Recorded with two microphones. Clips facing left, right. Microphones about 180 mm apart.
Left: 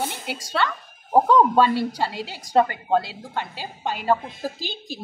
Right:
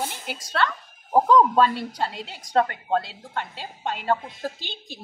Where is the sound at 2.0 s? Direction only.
5° left (ahead or behind).